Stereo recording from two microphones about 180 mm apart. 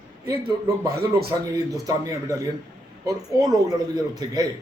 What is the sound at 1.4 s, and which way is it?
Speech, 20° right (ahead or behind).